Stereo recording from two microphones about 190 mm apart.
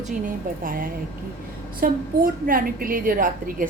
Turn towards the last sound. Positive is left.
turn(degrees=-45)  # may be behind; listen again after turning